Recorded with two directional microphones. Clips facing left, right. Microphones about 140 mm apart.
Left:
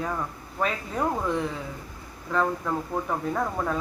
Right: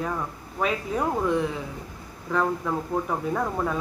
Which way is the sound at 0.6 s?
5° right (ahead or behind).